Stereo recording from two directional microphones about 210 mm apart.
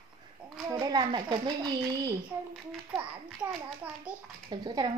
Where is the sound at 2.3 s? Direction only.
10° right (ahead or behind).